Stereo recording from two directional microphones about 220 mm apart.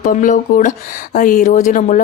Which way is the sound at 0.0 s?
35° left (ahead or behind).